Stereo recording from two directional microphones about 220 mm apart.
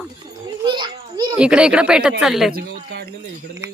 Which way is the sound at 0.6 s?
20° right (ahead or behind).